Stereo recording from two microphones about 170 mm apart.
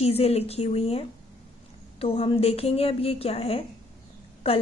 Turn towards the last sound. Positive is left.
turn(degrees=35)  # may be behind; listen again after turning